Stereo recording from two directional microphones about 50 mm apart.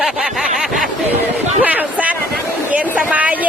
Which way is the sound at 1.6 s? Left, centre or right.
Right.